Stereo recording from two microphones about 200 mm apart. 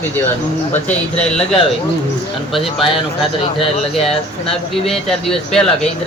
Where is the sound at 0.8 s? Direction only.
5° left (ahead or behind).